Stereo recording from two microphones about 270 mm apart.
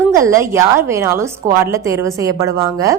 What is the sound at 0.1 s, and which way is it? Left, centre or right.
A woman's voice, centre.